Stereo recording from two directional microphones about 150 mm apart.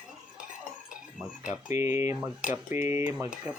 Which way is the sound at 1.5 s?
20° right (ahead or behind).